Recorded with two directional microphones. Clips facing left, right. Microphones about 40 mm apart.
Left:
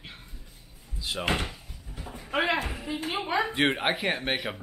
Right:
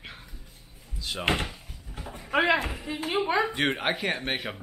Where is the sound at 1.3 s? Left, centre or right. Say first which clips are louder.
Right 2 dB; right.